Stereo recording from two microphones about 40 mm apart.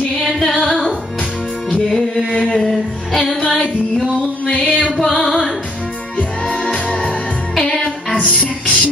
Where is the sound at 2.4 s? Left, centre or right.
Left.